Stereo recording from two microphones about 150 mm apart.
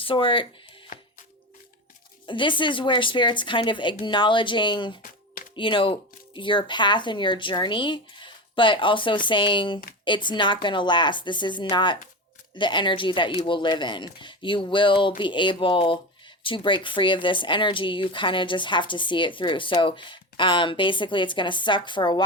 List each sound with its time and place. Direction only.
0.0 s speech: 35° left (ahead or behind)
2.2 s speech: 35° left (ahead or behind)